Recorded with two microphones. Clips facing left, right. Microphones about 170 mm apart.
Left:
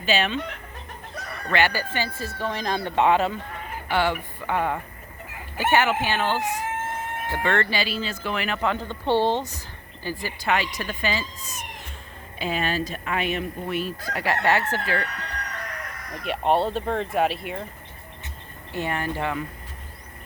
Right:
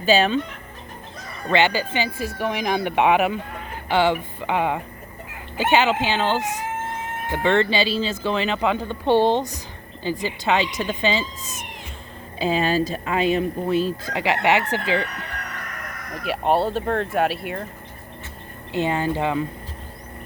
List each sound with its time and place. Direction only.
0.0 s speech: 35° right (ahead or behind)
1.5 s speech: 25° right (ahead or behind)
3.8 s speech: 25° right (ahead or behind)
16.2 s speech: centre (ahead or behind)
18.7 s speech: 20° right (ahead or behind)